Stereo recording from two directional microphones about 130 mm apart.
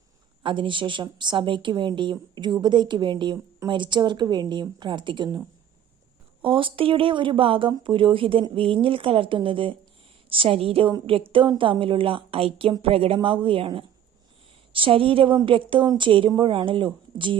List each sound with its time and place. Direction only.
0.4 s a woman's voice: 40° right (ahead or behind)
6.4 s a woman's voice: 40° right (ahead or behind)